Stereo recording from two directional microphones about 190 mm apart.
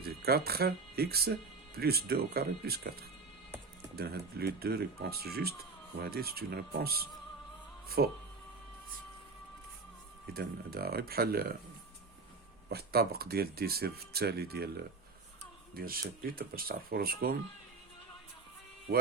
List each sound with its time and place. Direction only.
0.0 s speech: 55° right (ahead or behind)
10.3 s speech: 55° right (ahead or behind)
12.6 s speech: 55° right (ahead or behind)